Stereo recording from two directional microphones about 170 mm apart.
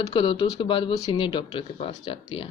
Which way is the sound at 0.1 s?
30° left (ahead or behind).